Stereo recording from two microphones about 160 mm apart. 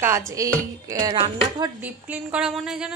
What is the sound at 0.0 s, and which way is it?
Speech, 15° right (ahead or behind).